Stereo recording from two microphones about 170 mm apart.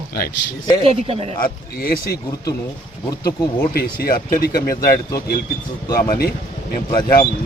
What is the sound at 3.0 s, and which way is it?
Speech, 20° left (ahead or behind).